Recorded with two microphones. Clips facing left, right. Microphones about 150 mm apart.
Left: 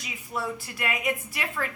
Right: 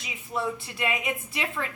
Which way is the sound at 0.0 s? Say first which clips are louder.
Right 2 dB; 25° right (ahead or behind).